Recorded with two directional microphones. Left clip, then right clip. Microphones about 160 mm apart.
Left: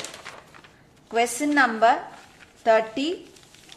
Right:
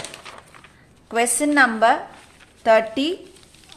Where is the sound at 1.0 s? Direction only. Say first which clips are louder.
Right 3 dB; 20° right (ahead or behind).